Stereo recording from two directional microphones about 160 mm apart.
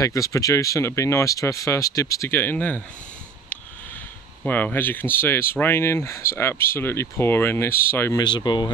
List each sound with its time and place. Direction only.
0.0 s speech: 20° left (ahead or behind)
4.5 s speech: 10° left (ahead or behind)
8.2 s speech: 25° left (ahead or behind)